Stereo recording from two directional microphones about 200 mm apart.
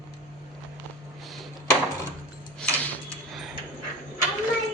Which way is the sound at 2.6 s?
5° left (ahead or behind).